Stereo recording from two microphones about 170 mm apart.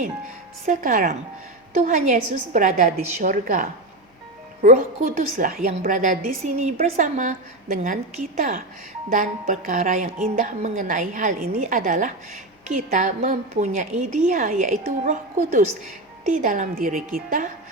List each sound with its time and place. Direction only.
0.6 s a woman's voice: 55° right (ahead or behind)
10.1 s a woman's voice: 35° right (ahead or behind)
10.3 s a woman's voice: 50° right (ahead or behind)